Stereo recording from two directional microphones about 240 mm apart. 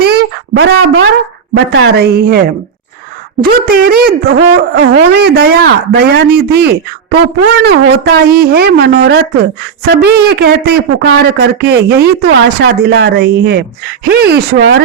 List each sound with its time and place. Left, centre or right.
0.0 s a sound: right
1.5 s speech: right
3.7 s speech: right